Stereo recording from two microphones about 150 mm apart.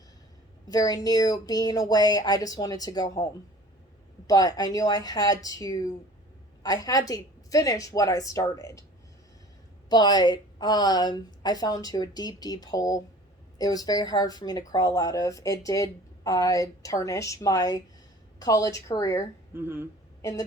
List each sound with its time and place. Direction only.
0.7 s speech: 25° left (ahead or behind)
4.3 s speech: 25° left (ahead or behind)
9.9 s speech: 25° left (ahead or behind)
19.5 s speech: 15° right (ahead or behind)